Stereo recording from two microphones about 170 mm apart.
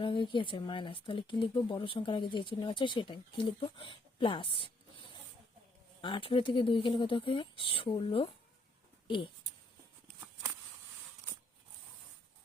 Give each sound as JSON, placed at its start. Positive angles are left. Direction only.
{"t": 0.0, "sound": "speech", "side_deg": 30}
{"t": 6.0, "sound": "speech", "side_deg": 30}